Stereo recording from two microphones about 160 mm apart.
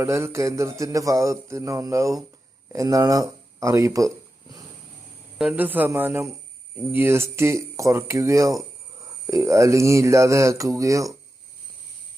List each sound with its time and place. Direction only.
0.0 s speech: 15° right (ahead or behind)
5.4 s speech: 10° right (ahead or behind)